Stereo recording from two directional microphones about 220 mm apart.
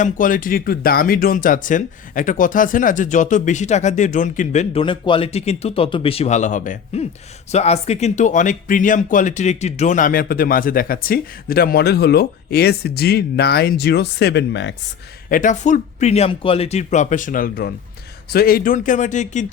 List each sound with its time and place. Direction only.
0.0 s speech: 40° left (ahead or behind)
15.3 s speech: 35° left (ahead or behind)